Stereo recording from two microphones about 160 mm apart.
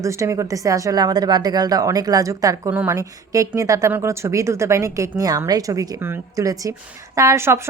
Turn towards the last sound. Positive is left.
turn(degrees=-15)  # may be behind; listen again after turning